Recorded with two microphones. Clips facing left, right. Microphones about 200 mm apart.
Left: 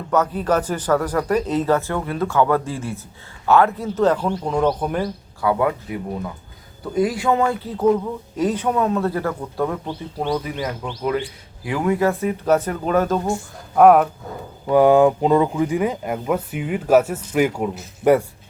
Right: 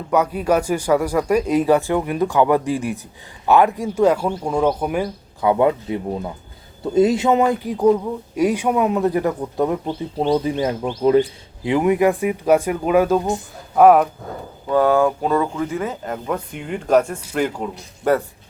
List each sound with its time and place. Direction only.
0.1 s speech: 10° right (ahead or behind)
5.4 s a man's voice: 20° right (ahead or behind)
13.7 s speech: centre (ahead or behind)
14.7 s speech: 15° left (ahead or behind)